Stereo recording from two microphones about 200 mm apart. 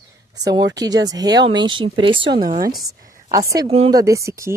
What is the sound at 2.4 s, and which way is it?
Speech, 45° right (ahead or behind).